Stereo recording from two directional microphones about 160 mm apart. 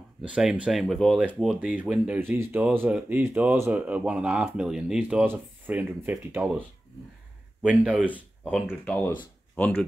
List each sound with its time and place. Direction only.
0.2 s speech: 5° right (ahead or behind)
7.6 s speech: 5° right (ahead or behind); by 9.7 s 10° left (ahead or behind)